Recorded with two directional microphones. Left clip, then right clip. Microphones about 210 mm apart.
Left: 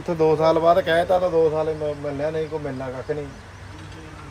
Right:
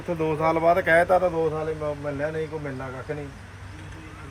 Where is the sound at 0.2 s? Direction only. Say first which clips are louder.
Left 6 dB; 30° left (ahead or behind).